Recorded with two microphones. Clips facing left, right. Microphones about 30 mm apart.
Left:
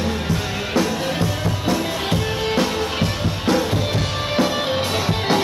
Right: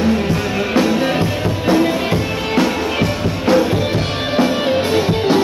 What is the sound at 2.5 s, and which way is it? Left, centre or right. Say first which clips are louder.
Music: right 7 dB; centre.